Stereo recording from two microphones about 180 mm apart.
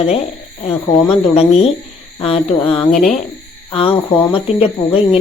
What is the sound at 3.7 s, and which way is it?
Speech, 30° left (ahead or behind).